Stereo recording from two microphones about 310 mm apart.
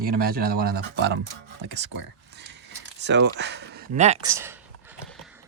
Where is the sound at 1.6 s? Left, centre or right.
Right.